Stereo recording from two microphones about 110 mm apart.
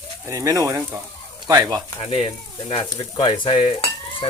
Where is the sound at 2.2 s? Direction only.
60° left (ahead or behind).